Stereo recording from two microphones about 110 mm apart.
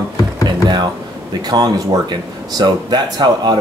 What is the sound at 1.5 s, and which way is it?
Speech, 35° right (ahead or behind).